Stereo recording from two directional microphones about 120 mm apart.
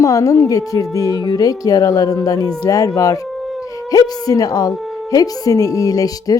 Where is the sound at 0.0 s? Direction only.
25° left (ahead or behind).